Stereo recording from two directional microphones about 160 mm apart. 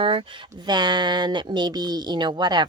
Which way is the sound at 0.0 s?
35° right (ahead or behind).